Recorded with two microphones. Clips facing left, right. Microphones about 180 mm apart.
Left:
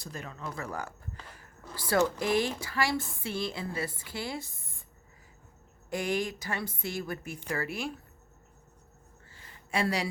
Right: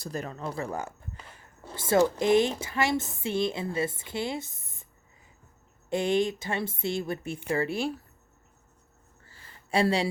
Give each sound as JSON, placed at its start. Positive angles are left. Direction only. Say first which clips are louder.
{"t": 0.0, "sound": "a woman's voice", "louder": "right 6 dB", "side_deg": -40}
{"t": 5.9, "sound": "a woman's voice", "louder": "right 6 dB", "side_deg": -25}
{"t": 9.3, "sound": "a sound", "louder": "right 5 dB", "side_deg": -30}